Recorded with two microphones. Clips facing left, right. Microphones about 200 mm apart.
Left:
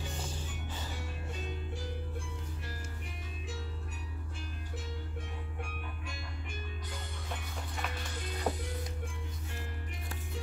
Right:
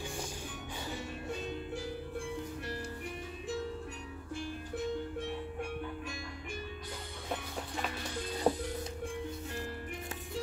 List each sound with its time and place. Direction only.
8.5 s music: 30° right (ahead or behind)